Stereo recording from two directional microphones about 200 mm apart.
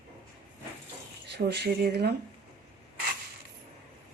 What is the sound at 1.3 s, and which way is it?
Speech, 55° right (ahead or behind).